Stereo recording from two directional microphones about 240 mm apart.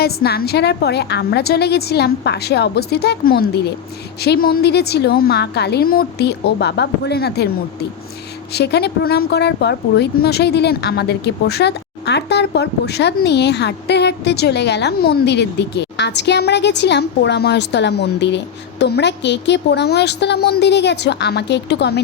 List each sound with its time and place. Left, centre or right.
0.0 s speech: left
8.5 s speech: left